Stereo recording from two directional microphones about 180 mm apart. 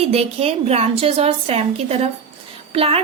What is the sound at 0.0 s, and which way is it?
Speech, 35° right (ahead or behind).